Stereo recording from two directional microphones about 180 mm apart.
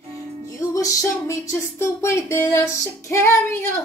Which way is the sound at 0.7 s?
15° left (ahead or behind).